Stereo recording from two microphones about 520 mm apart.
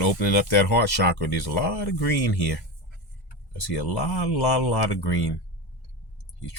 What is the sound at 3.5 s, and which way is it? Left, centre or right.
Speech, left.